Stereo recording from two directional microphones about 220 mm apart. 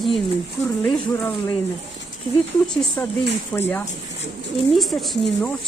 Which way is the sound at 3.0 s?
10° left (ahead or behind).